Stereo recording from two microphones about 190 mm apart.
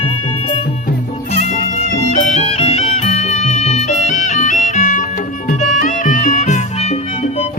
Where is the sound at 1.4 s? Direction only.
40° left (ahead or behind).